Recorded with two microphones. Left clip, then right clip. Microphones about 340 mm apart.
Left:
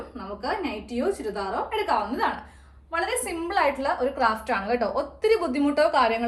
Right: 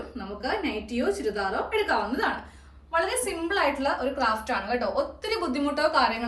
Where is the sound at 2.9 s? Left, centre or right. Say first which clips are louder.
Right 1 dB; centre.